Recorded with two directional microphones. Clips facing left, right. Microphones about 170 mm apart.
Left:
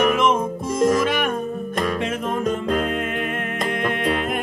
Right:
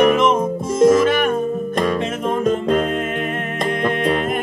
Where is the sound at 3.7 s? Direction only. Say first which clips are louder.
Right 4 dB; 5° left (ahead or behind).